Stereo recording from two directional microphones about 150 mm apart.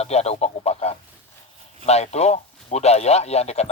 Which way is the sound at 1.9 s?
45° left (ahead or behind).